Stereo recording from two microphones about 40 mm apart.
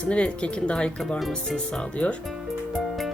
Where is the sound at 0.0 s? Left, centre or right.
Left.